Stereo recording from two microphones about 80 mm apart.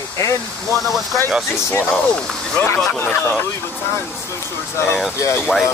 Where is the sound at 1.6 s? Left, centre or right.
Left.